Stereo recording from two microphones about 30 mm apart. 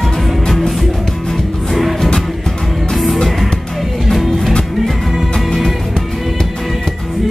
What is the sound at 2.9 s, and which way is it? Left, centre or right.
Music, centre.